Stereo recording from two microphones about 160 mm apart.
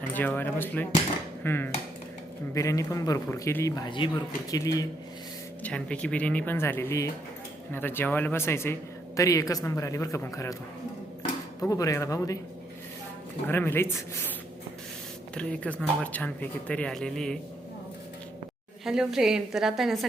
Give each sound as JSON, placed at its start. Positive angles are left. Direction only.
{"t": 0.1, "sound": "speech", "side_deg": 10}
{"t": 3.8, "sound": "speech", "side_deg": 30}
{"t": 5.6, "sound": "speech", "side_deg": 5}
{"t": 11.7, "sound": "speech", "side_deg": 20}
{"t": 13.5, "sound": "speech", "side_deg": 15}
{"t": 15.4, "sound": "speech", "side_deg": 5}
{"t": 18.9, "sound": "a woman's voice", "side_deg": -5}